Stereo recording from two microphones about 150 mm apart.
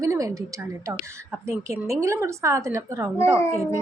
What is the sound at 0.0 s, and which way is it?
A woman's voice, 20° right (ahead or behind).